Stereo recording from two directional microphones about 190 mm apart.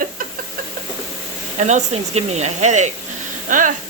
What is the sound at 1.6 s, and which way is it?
Speech, 40° right (ahead or behind).